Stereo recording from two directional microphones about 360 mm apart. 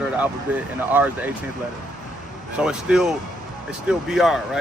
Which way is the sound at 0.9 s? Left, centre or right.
Centre.